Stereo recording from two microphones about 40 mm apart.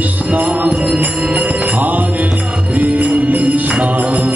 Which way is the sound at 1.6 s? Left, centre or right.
Right.